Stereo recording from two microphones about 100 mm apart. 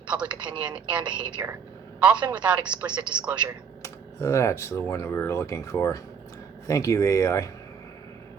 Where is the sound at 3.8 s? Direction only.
30° left (ahead or behind).